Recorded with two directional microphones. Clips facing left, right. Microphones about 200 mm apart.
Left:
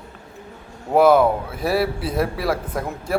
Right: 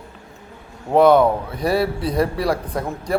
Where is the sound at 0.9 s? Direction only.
5° left (ahead or behind).